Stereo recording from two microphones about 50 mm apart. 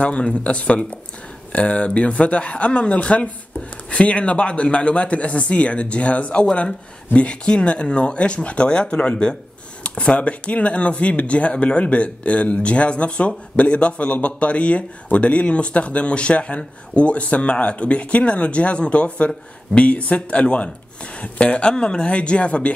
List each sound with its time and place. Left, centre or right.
0.0 s speech: left